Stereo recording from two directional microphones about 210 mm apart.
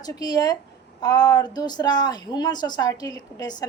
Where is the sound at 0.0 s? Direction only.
20° left (ahead or behind).